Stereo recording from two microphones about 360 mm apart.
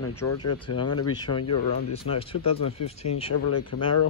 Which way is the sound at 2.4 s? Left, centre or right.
Left.